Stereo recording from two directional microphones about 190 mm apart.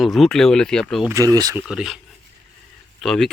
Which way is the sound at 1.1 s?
15° right (ahead or behind).